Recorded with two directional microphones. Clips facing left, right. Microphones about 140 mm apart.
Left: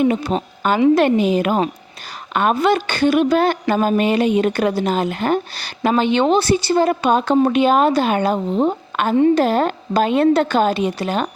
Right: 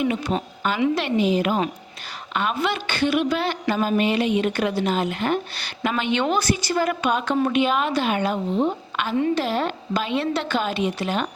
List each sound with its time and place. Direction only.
0.0 s a woman's voice: 40° left (ahead or behind)